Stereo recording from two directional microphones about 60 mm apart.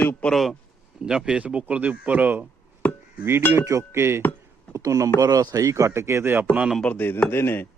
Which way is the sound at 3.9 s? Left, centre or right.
Right.